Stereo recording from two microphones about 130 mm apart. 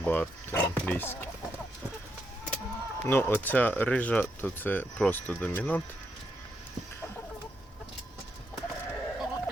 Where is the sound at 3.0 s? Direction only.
15° left (ahead or behind).